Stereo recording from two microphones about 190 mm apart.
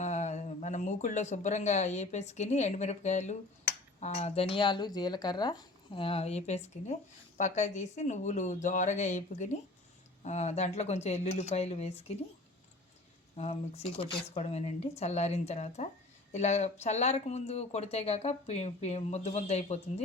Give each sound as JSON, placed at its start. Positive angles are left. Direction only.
{"t": 0.0, "sound": "speech", "side_deg": 40}
{"t": 13.3, "sound": "speech", "side_deg": 35}